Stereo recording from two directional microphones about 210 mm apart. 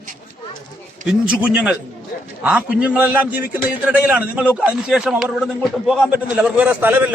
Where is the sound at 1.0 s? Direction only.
5° right (ahead or behind).